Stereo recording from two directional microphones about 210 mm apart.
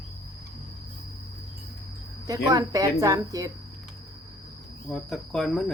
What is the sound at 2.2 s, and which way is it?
Speech, 15° right (ahead or behind).